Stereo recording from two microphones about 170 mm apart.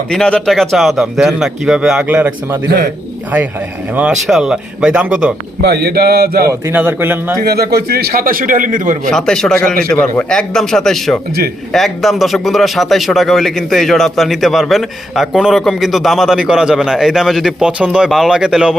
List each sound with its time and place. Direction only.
0.1 s a man's voice: 5° left (ahead or behind); by 2.6 s 10° right (ahead or behind)
3.9 s a man's voice: 5° right (ahead or behind)
5.6 s mantra: 70° right (ahead or behind)
6.5 s a man's voice: 15° right (ahead or behind)
7.4 s a man's voice: 65° right (ahead or behind); by 9.0 s 50° right (ahead or behind)
9.0 s a man's voice: 5° left (ahead or behind)